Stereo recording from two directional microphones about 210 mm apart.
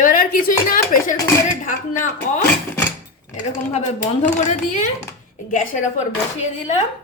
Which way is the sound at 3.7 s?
35° left (ahead or behind).